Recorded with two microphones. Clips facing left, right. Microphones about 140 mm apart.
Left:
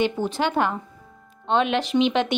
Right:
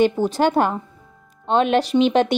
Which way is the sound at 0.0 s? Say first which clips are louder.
Right 6 dB; 40° right (ahead or behind).